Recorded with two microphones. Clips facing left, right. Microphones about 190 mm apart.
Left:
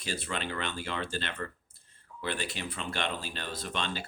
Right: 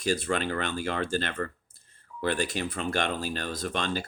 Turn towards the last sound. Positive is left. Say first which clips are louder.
# right 5 dB
turn(degrees=-45)  # may be behind; listen again after turning